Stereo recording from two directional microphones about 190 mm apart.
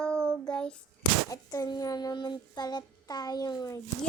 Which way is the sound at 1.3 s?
15° left (ahead or behind).